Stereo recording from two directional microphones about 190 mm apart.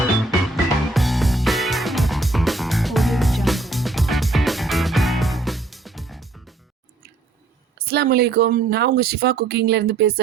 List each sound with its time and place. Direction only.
0.2 s music: centre (ahead or behind)
7.8 s speech: 55° right (ahead or behind)